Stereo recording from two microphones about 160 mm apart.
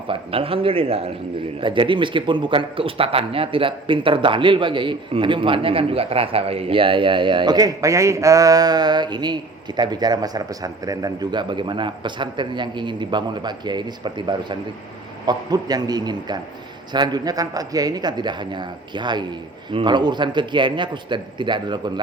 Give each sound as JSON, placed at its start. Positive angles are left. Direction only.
{"t": 0.1, "sound": "a man's voice", "side_deg": -35}